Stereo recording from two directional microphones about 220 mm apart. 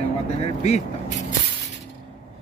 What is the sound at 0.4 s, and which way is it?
Speech, 30° left (ahead or behind).